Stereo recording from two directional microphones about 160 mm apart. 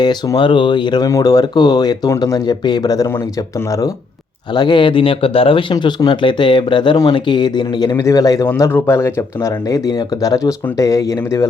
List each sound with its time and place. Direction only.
0.0 s speech: 25° left (ahead or behind)